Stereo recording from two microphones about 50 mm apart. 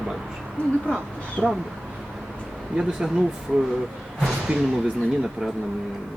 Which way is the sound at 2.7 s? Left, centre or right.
Centre.